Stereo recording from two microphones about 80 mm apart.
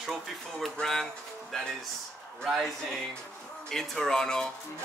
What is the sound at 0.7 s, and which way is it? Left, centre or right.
Speech, centre.